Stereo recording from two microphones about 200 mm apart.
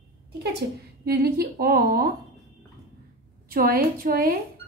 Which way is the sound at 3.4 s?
50° right (ahead or behind).